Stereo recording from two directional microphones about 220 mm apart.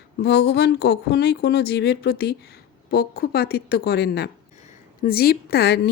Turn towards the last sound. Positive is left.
turn(degrees=45)  # may be behind; listen again after turning